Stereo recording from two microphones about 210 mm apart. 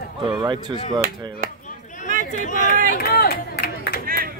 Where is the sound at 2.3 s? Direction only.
35° left (ahead or behind).